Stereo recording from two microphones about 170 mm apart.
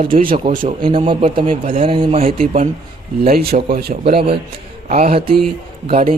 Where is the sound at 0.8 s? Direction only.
30° right (ahead or behind).